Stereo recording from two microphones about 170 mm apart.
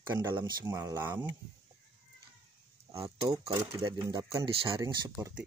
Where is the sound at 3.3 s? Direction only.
20° right (ahead or behind).